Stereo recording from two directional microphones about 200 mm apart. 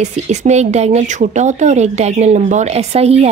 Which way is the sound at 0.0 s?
35° right (ahead or behind).